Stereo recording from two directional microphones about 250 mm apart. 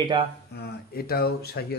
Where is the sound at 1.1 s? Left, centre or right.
Left.